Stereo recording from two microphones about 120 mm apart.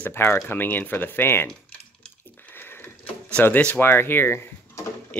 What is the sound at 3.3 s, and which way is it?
Speech, 15° left (ahead or behind).